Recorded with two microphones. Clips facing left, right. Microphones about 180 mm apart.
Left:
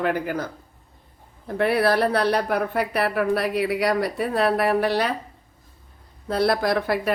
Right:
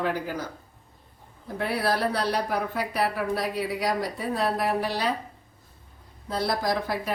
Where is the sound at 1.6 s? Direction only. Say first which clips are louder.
Left 6 dB; 65° left (ahead or behind).